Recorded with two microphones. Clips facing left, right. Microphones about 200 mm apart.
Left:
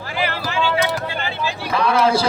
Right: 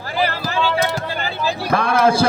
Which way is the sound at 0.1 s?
40° right (ahead or behind).